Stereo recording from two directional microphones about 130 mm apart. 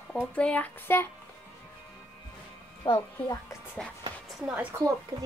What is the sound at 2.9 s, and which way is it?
Speech, 40° left (ahead or behind).